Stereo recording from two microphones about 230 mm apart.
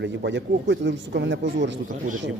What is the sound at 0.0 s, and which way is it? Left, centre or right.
Speech, right.